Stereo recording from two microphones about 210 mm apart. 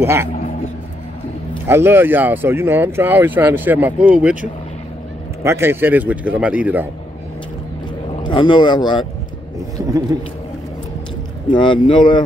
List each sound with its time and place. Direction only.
0.0 s speech: 10° right (ahead or behind)
1.7 s speech: 10° right (ahead or behind)
5.4 s speech: 10° right (ahead or behind)
8.2 s speech: 20° left (ahead or behind)
10.1 s speech: 15° right (ahead or behind)
11.4 s speech: 25° left (ahead or behind)